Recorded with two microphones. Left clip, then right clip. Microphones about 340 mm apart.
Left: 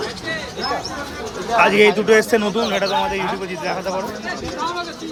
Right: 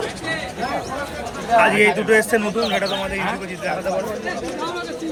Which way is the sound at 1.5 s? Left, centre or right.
Left.